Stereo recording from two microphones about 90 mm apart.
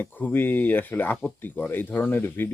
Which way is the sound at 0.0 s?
20° left (ahead or behind).